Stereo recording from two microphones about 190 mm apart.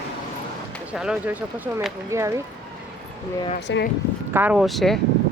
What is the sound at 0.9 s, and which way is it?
Speech, 5° right (ahead or behind).